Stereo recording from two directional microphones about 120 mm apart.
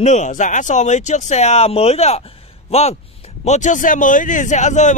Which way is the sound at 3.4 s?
80° left.